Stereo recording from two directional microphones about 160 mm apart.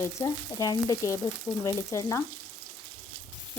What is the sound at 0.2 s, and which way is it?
Speech, 25° left (ahead or behind).